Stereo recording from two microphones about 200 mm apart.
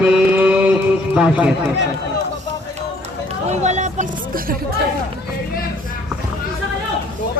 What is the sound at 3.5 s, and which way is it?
Speech, 35° right (ahead or behind).